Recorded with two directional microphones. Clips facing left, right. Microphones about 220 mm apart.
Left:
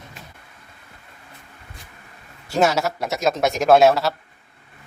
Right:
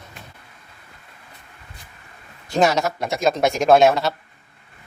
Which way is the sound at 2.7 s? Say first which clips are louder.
Right 1 dB; 5° left (ahead or behind).